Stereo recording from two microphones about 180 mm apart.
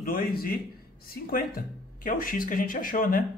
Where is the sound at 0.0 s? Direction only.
55° left (ahead or behind).